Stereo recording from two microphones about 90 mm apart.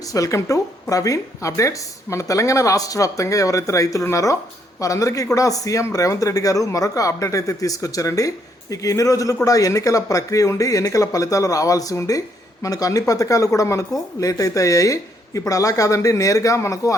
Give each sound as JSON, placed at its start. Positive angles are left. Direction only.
{"t": 0.1, "sound": "speech", "side_deg": 40}